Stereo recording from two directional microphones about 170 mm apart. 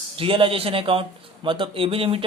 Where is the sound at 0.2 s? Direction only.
30° right (ahead or behind).